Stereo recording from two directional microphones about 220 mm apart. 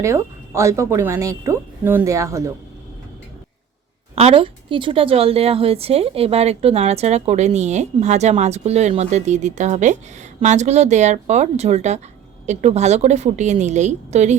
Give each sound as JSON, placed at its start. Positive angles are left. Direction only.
{"t": 0.0, "sound": "a woman's voice", "side_deg": -10}
{"t": 4.1, "sound": "a woman's voice", "side_deg": -25}